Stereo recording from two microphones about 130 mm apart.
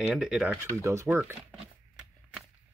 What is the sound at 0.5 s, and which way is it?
Speech, 20° right (ahead or behind).